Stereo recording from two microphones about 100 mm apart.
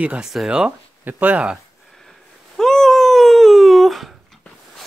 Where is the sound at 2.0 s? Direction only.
5° left (ahead or behind).